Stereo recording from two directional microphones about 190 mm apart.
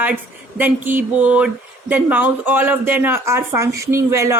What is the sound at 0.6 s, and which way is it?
Speech, 10° right (ahead or behind).